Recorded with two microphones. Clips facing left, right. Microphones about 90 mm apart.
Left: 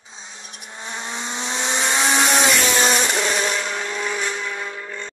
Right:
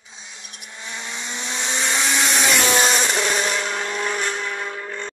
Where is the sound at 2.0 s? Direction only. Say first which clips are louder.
Left 4 dB; 35° left (ahead or behind).